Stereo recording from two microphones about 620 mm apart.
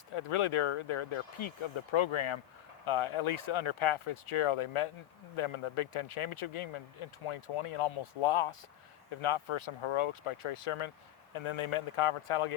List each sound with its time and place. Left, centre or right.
0.1 s speech: left